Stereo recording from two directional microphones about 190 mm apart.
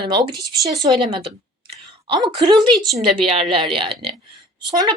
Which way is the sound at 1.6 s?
25° right (ahead or behind).